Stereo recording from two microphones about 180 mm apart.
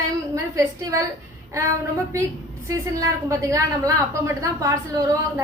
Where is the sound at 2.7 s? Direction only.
15° right (ahead or behind).